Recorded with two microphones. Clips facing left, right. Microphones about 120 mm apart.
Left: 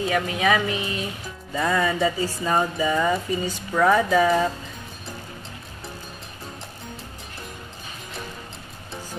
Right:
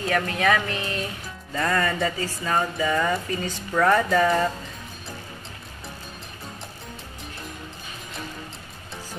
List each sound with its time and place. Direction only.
0.0 s music: 10° left (ahead or behind)